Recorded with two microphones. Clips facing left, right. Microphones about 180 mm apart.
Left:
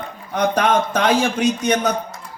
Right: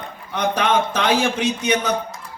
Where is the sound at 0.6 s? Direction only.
55° left (ahead or behind).